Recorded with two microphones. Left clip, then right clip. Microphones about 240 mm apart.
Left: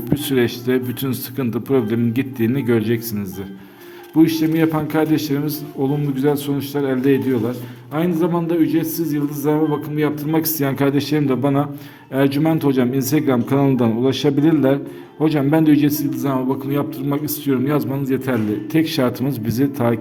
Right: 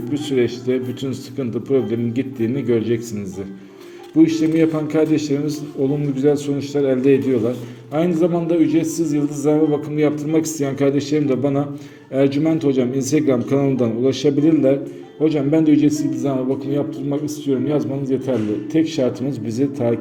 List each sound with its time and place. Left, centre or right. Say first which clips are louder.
0.1 s a man's voice: left 1 dB; left